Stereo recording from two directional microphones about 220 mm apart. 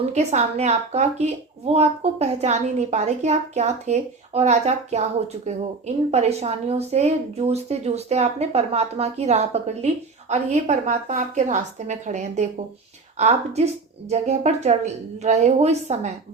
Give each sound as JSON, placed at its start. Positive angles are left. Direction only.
{"t": 0.0, "sound": "a woman's voice", "side_deg": -30}
{"t": 6.1, "sound": "a woman's voice", "side_deg": -30}